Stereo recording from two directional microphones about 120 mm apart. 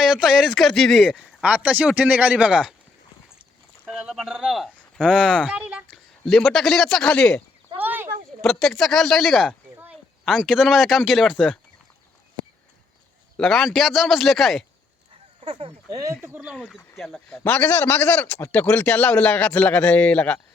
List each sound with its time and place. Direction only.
0.0 s speech: 5° right (ahead or behind)
3.8 s speech: 5° right (ahead or behind)
6.2 s speech: centre (ahead or behind)
7.8 s a sound: 15° right (ahead or behind)
8.4 s speech: 5° left (ahead or behind)
13.3 s speech: 5° left (ahead or behind)
15.4 s speech: 50° right (ahead or behind)
15.9 s speech: 30° right (ahead or behind)
16.2 s speech: 15° right (ahead or behind)
16.6 s a man's voice: 10° left (ahead or behind)